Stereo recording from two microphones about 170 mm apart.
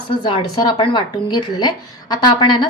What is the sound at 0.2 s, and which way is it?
Speech, 25° left (ahead or behind).